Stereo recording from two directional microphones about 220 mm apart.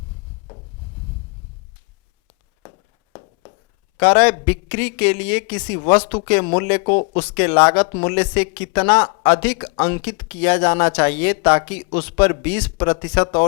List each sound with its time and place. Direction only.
2.6 s a sound: 25° left (ahead or behind)
3.9 s speech: 20° left (ahead or behind)
6.8 s speech: 30° left (ahead or behind)
7.3 s speech: 15° left (ahead or behind)
10.0 s speech: 10° left (ahead or behind)
12.7 s speech: 20° left (ahead or behind)